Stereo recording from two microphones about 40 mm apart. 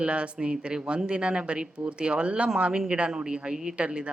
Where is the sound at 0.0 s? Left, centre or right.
Right.